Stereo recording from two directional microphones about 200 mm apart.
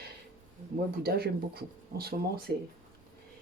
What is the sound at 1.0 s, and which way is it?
Speech, 50° right (ahead or behind).